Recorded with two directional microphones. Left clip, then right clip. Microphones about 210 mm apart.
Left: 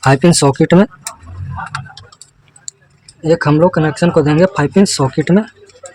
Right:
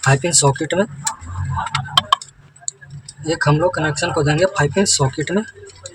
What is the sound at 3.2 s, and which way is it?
Speech, 50° left (ahead or behind).